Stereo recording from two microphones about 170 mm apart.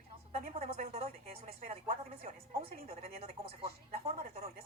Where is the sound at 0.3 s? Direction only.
40° right (ahead or behind).